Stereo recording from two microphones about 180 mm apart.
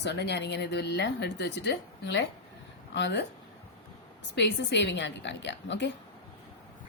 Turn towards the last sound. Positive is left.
turn(degrees=80)